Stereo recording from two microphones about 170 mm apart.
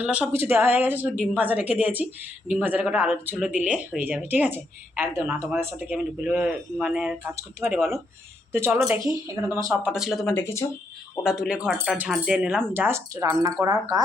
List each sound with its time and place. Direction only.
0.0 s speech: 10° right (ahead or behind)
8.5 s speech: 15° right (ahead or behind)
9.8 s speech: 5° right (ahead or behind)
10.3 s speech: 15° left (ahead or behind)
11.2 s speech: 5° right (ahead or behind); by 14.0 s 20° right (ahead or behind)